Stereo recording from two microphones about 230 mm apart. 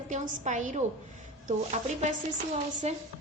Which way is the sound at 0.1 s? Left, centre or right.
Right.